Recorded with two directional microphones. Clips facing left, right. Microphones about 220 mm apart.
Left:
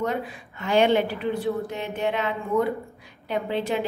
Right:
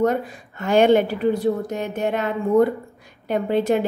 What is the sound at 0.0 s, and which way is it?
A woman's voice, 45° right (ahead or behind).